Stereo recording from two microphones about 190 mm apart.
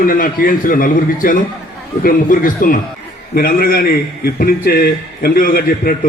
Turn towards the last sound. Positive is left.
turn(degrees=50)  # may be behind; listen again after turning